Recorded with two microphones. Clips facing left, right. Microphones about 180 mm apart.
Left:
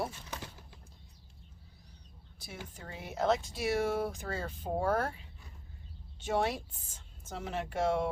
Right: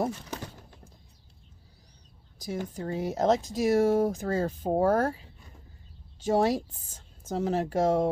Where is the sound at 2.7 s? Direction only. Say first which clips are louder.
Right 7 dB; 40° right (ahead or behind).